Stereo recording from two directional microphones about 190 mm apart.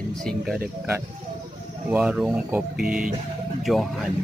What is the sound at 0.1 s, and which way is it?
Speech, centre (ahead or behind).